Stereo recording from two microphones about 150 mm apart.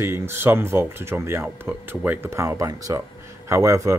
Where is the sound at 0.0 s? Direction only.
15° right (ahead or behind).